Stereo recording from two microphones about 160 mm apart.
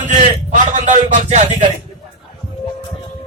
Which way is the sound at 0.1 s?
50° right (ahead or behind).